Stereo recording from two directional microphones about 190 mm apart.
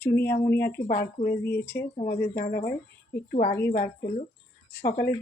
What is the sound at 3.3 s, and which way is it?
Speech, 50° left (ahead or behind).